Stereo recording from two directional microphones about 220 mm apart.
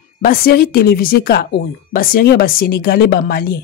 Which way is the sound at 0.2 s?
40° left (ahead or behind).